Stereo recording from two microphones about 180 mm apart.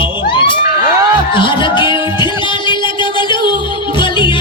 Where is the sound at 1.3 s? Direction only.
25° left (ahead or behind).